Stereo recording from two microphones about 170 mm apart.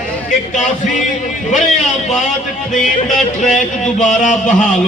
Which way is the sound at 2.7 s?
45° left (ahead or behind).